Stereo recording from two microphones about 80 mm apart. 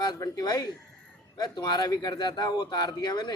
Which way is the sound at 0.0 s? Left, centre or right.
Left.